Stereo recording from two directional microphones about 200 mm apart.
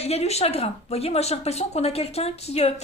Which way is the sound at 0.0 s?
30° left (ahead or behind).